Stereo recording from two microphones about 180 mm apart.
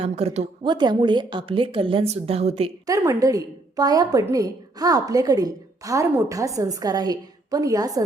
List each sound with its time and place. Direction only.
0.0 s a woman's voice: 35° right (ahead or behind)
2.8 s a woman's voice: 20° right (ahead or behind)